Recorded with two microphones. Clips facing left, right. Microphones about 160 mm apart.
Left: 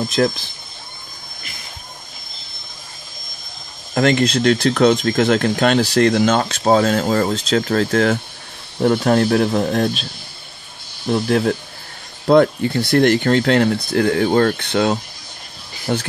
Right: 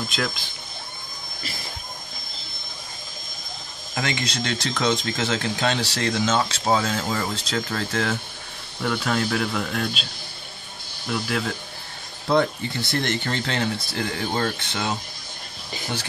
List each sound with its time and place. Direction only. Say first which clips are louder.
3.9 s speech: left 12 dB; 55° left (ahead or behind)
8.7 s speech: left 10 dB; 40° left (ahead or behind)
11.1 s speech: left 10 dB; 40° left (ahead or behind)
12.3 s speech: left 8 dB; 55° left (ahead or behind)